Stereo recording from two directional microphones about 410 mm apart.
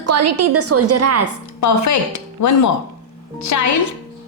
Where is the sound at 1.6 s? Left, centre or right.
Left.